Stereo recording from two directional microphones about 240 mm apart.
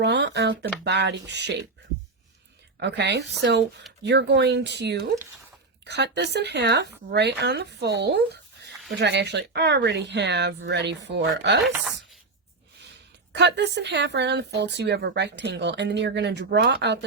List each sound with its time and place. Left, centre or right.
0.0 s speech: right
2.8 s speech: right
13.3 s speech: right